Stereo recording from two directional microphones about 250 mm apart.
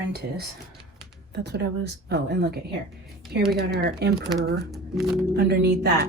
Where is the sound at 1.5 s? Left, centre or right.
Right.